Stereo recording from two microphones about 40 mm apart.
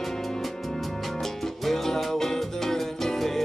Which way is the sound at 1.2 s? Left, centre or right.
Centre.